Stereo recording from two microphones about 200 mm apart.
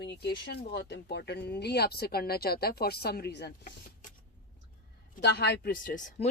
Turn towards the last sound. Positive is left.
turn(degrees=40)  # may be behind; listen again after turning